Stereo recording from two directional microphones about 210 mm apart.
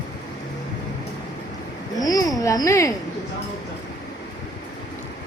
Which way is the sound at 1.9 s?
15° left (ahead or behind).